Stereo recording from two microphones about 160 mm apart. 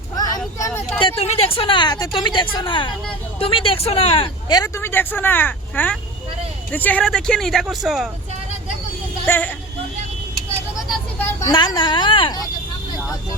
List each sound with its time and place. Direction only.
0.6 s a sound: 15° left (ahead or behind)
1.0 s a woman's voice: 40° left (ahead or behind); by 8.1 s centre (ahead or behind)
9.2 s speech: 10° left (ahead or behind)
10.8 s vehicle: centre (ahead or behind)
11.4 s speech: 25° left (ahead or behind)